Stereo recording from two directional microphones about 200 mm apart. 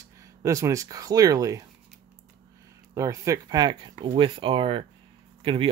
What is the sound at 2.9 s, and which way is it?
Speech, 15° right (ahead or behind).